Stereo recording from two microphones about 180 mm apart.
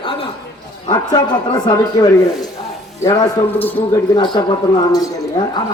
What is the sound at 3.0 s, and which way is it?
Speech, 20° left (ahead or behind).